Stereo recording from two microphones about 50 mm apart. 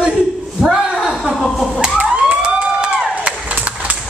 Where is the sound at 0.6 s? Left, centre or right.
Centre.